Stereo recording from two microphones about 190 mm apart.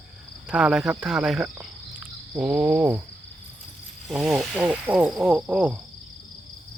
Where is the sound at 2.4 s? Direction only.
5° right (ahead or behind).